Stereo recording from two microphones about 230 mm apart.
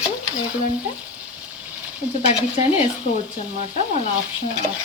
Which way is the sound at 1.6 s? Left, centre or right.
Centre.